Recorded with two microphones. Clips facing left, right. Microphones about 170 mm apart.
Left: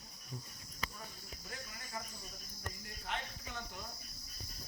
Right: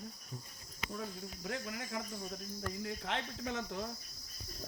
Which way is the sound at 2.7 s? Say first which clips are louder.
Right 5 dB; 90° right.